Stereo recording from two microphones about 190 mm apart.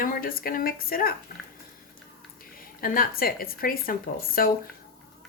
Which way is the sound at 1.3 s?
50° left (ahead or behind).